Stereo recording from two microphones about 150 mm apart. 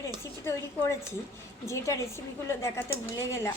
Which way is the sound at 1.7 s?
20° left (ahead or behind).